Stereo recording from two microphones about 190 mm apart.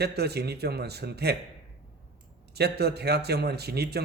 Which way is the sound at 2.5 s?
60° right (ahead or behind).